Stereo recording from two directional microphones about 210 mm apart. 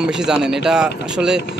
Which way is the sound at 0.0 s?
5° right (ahead or behind).